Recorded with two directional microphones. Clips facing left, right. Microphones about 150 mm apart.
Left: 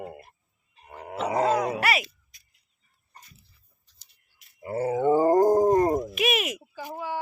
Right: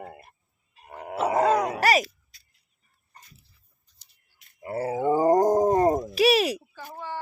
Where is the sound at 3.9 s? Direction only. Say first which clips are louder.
Even; 90° left.